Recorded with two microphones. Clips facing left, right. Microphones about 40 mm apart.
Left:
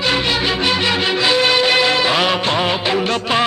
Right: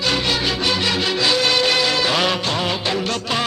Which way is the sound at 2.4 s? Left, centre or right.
Left.